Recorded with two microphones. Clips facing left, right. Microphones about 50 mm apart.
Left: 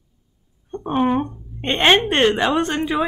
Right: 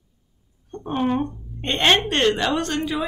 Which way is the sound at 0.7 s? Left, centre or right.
Left.